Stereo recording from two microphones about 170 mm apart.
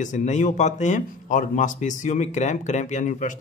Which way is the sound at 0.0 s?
45° left (ahead or behind).